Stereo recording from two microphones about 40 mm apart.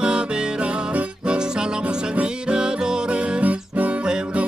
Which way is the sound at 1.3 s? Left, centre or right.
Right.